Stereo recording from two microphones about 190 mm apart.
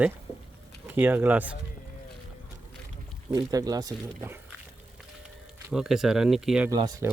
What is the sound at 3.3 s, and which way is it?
Speech, 20° right (ahead or behind).